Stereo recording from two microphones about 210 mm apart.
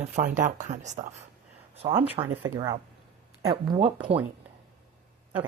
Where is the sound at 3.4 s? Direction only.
25° right (ahead or behind).